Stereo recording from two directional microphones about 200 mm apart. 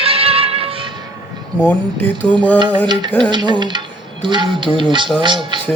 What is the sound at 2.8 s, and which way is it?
Speech, 20° right (ahead or behind).